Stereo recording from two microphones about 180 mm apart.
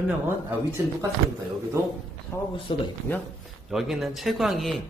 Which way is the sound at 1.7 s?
15° right (ahead or behind).